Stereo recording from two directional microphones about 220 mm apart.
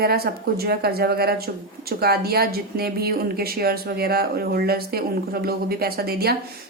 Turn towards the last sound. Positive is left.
turn(degrees=-45)  # may be behind; listen again after turning